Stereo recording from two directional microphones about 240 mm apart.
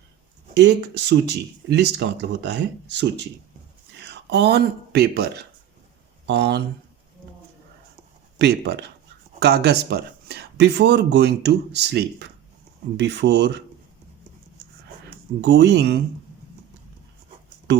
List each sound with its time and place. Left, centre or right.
0.5 s speech: right
8.4 s speech: right
15.4 s speech: right